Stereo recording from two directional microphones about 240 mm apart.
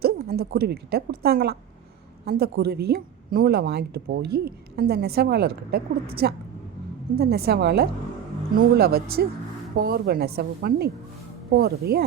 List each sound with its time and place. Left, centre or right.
0.0 s speech: right